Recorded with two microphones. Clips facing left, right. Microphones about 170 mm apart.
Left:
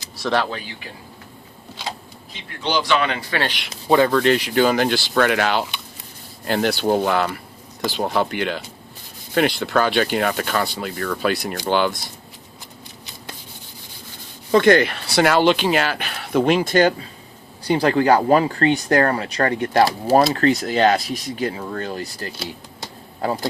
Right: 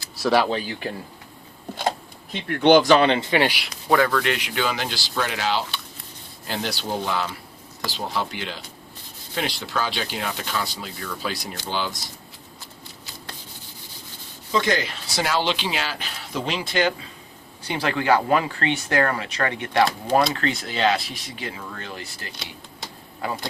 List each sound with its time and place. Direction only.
0.2 s speech: 5° right (ahead or behind)
2.3 s a man's voice: 60° right (ahead or behind); by 3.7 s 10° right (ahead or behind)
3.8 s speech: 25° left (ahead or behind); by 12.0 s 60° left (ahead or behind)
14.5 s speech: 60° left (ahead or behind); by 23.4 s 35° left (ahead or behind)